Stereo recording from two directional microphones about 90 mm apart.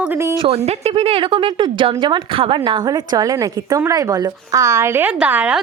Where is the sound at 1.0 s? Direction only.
90° right; by 2.7 s 75° right (ahead or behind).